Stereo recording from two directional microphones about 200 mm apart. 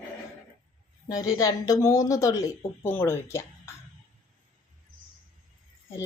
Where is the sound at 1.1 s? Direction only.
15° left (ahead or behind).